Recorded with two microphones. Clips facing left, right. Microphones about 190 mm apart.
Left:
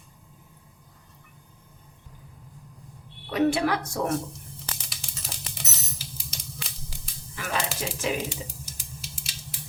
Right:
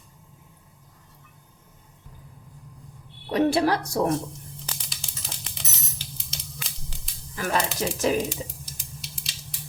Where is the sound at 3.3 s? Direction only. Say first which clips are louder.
Right 2 dB; 35° right (ahead or behind).